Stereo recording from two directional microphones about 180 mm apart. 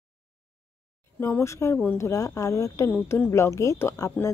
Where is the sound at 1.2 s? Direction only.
15° left (ahead or behind).